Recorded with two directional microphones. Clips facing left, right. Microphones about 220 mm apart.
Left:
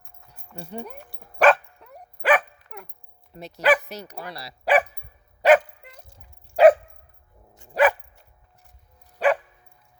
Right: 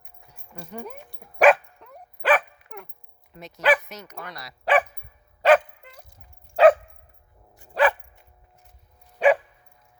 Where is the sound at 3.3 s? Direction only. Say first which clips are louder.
Left 1 dB; 30° left (ahead or behind).